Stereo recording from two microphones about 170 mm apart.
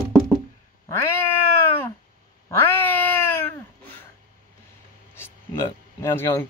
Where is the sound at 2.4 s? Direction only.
10° left (ahead or behind).